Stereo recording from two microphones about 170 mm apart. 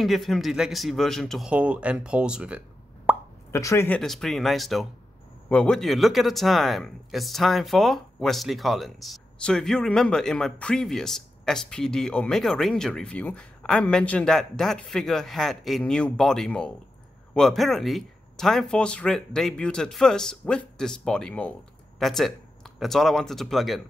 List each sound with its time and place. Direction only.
0.0 s speech: centre (ahead or behind)
3.1 s plop: 10° right (ahead or behind)
3.5 s speech: 15° left (ahead or behind)
4.0 s speech: centre (ahead or behind)